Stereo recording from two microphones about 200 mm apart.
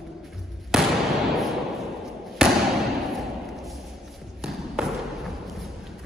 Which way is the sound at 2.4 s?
5° right (ahead or behind).